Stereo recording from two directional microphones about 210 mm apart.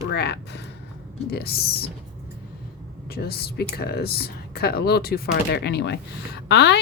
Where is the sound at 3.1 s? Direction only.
50° left (ahead or behind).